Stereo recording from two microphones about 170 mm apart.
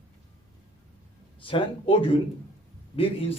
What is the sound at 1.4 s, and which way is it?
A man's voice, 30° left (ahead or behind).